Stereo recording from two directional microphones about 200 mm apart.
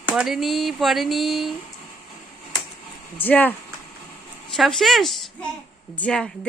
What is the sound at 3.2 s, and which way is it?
Speech, 10° left (ahead or behind).